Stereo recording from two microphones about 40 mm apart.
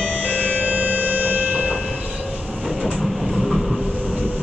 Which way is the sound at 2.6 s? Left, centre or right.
Centre.